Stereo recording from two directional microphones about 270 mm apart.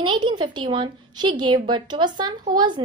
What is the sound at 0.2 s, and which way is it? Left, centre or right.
A woman's voice, centre.